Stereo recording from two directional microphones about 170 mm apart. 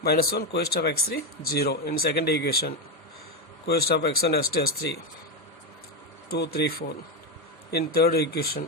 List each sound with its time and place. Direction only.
0.0 s speech: 65° left (ahead or behind)
6.3 s speech: 70° left (ahead or behind)